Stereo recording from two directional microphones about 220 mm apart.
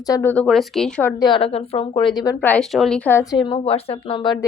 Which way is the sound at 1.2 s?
25° left (ahead or behind).